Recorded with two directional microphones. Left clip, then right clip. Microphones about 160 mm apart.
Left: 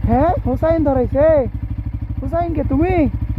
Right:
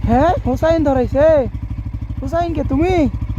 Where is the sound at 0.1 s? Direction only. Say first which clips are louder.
Right 2 dB; 15° right (ahead or behind).